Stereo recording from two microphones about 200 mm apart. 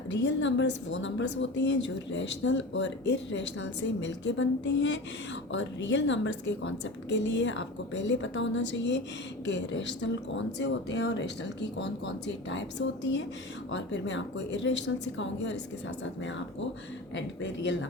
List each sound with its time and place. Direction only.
0.1 s a woman's voice: 65° left (ahead or behind)
17.2 s a woman's voice: 65° left (ahead or behind)